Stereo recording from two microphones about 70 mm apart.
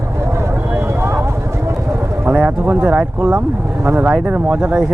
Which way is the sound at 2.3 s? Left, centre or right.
Centre.